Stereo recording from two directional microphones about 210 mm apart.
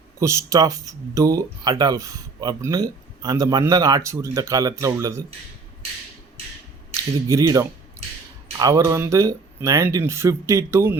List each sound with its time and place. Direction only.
0.2 s speech: 15° right (ahead or behind)
6.9 s speech: 15° right (ahead or behind)